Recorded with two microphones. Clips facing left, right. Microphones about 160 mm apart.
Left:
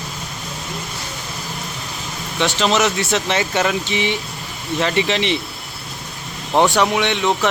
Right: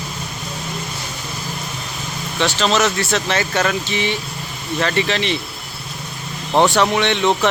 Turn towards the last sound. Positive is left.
turn(degrees=5)  # may be behind; listen again after turning